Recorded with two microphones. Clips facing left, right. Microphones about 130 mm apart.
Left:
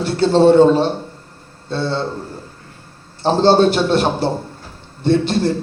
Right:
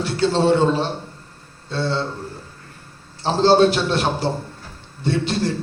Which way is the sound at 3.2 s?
55° left (ahead or behind).